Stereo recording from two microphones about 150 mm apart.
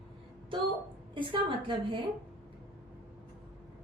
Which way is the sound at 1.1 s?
35° right (ahead or behind).